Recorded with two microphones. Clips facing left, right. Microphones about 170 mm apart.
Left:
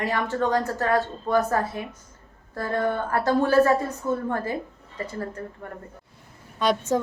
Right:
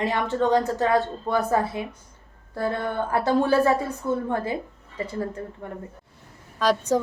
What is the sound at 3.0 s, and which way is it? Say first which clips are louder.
Speech: right 3 dB; 15° right (ahead or behind).